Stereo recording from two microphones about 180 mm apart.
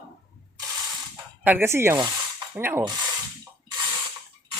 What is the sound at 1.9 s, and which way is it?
Rub, 25° right (ahead or behind).